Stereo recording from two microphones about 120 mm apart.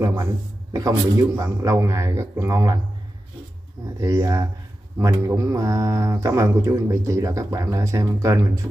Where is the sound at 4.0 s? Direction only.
30° right (ahead or behind).